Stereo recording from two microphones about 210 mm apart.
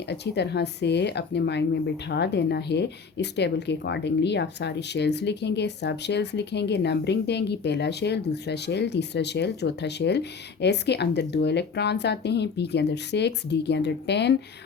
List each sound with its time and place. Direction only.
0.1 s speech: 55° left (ahead or behind)